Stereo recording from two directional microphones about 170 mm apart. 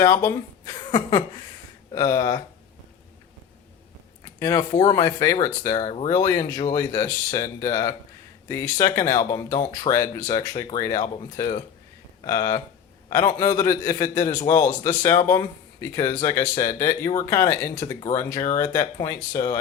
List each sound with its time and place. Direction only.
0.0 s speech: 20° left (ahead or behind)
4.4 s speech: 20° left (ahead or behind)
5.7 s speech: 35° left (ahead or behind)
6.1 s speech: 20° left (ahead or behind)